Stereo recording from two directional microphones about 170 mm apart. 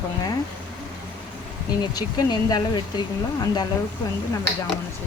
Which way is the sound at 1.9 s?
25° left (ahead or behind).